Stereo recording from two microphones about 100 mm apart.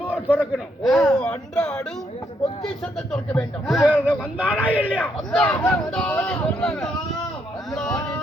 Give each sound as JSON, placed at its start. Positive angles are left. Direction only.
{"t": 0.1, "sound": "a sound", "side_deg": 15}
{"t": 0.5, "sound": "speech", "side_deg": 0}
{"t": 3.1, "sound": "speech", "side_deg": 5}
{"t": 3.8, "sound": "speech", "side_deg": -15}
{"t": 5.4, "sound": "speech", "side_deg": 15}